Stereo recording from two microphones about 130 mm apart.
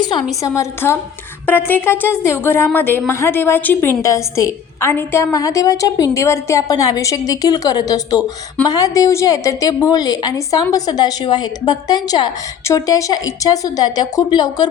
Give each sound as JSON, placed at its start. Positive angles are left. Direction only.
{"t": 0.3, "sound": "a woman's voice", "side_deg": 25}